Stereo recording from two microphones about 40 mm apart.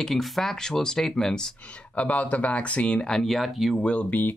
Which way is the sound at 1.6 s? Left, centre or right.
Left.